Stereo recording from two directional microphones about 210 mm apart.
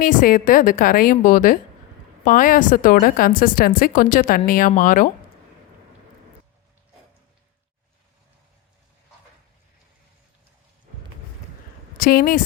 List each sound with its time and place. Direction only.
0.0 s a woman's voice: 40° left (ahead or behind)
11.9 s speech: 45° left (ahead or behind)